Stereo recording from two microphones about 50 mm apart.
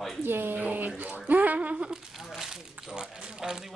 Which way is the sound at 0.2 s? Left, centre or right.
Right.